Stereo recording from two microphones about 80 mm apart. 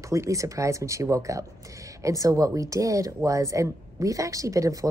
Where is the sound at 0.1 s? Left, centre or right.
Right.